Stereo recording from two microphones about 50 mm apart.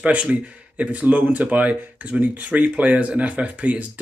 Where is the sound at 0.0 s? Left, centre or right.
Right.